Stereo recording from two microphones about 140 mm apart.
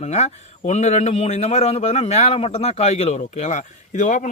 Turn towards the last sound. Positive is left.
turn(degrees=60)  # may be behind; listen again after turning